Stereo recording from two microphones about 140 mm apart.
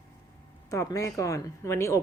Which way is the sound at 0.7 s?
25° left (ahead or behind).